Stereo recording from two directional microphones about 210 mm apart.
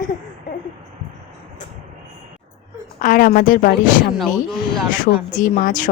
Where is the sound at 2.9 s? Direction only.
40° left (ahead or behind).